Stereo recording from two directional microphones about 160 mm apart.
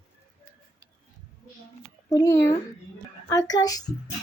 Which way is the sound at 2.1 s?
20° left (ahead or behind).